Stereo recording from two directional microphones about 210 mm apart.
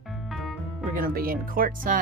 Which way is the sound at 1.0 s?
45° right (ahead or behind).